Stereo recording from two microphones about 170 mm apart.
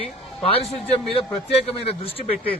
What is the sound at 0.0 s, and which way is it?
A man's voice, 35° left (ahead or behind).